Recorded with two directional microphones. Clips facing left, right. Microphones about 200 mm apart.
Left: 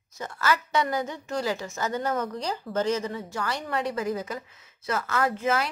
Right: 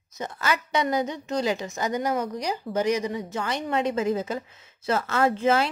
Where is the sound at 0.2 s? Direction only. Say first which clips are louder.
Even; 20° right (ahead or behind).